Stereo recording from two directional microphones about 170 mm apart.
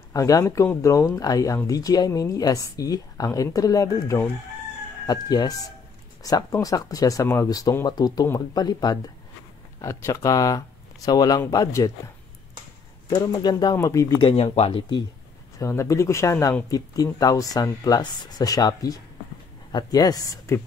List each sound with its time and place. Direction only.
0.1 s speech: 20° left (ahead or behind)
13.1 s speech: 20° left (ahead or behind)
15.6 s speech: 15° left (ahead or behind)